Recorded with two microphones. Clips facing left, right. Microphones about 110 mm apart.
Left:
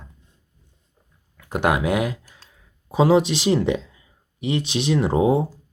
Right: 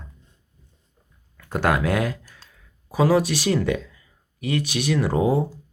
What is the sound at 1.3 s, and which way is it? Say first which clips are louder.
Speech: left 1 dB; 10° left (ahead or behind).